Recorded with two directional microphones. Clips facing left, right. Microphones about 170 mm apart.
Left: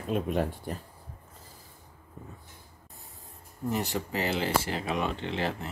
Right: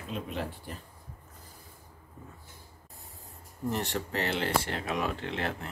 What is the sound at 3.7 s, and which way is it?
Speech, centre (ahead or behind).